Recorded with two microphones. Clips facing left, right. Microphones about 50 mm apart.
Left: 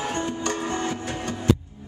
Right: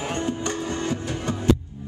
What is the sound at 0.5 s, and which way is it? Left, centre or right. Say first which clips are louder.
Music: even; left.